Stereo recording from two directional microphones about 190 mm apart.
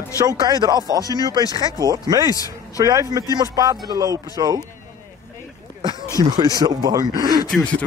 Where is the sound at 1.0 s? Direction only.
20° left (ahead or behind).